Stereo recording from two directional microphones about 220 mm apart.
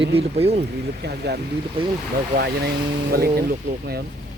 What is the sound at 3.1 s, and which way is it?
Speech, 45° right (ahead or behind).